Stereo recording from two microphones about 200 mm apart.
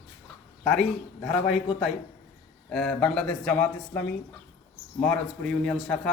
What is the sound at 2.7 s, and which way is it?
Speech, 5° left (ahead or behind).